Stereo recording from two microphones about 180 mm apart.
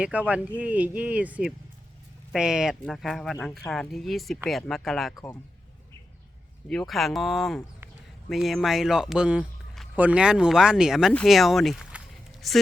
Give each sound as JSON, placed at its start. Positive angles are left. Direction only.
{"t": 0.0, "sound": "speech", "side_deg": -5}
{"t": 5.1, "sound": "speech", "side_deg": 15}
{"t": 6.7, "sound": "speech", "side_deg": 0}